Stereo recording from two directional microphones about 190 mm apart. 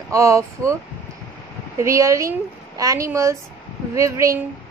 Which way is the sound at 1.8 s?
15° right (ahead or behind).